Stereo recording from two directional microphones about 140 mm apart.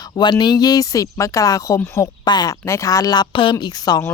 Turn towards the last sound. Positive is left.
turn(degrees=30)  # may be behind; listen again after turning